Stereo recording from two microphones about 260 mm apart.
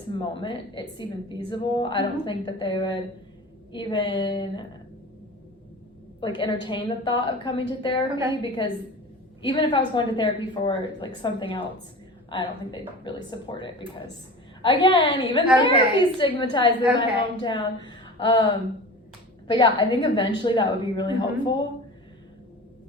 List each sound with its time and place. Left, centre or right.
0.1 s a woman's voice: centre
6.1 s a woman's voice: centre
19.5 s a woman's voice: centre